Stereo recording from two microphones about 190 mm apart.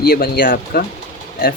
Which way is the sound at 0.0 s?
55° left (ahead or behind).